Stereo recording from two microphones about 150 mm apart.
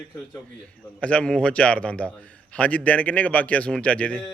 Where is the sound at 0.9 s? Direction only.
10° left (ahead or behind).